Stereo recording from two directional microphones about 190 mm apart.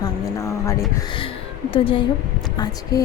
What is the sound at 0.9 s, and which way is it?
Speech, 25° left (ahead or behind).